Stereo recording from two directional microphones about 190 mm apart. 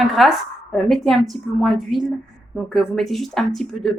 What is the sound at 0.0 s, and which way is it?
A woman's voice, centre (ahead or behind).